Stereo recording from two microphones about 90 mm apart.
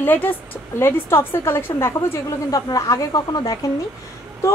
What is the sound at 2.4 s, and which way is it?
A woman's voice, 40° left (ahead or behind).